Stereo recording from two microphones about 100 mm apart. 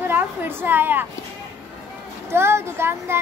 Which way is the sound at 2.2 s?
25° right (ahead or behind).